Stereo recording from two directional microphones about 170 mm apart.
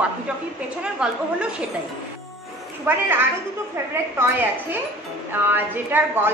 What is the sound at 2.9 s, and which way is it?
Speech, 10° right (ahead or behind).